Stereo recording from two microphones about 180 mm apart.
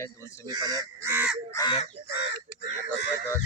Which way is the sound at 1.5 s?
25° left (ahead or behind).